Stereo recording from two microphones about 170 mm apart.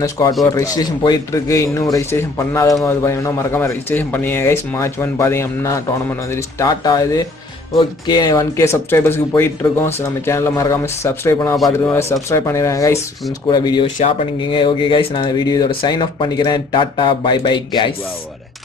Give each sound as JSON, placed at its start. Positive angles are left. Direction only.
{"t": 0.5, "sound": "speech", "side_deg": 20}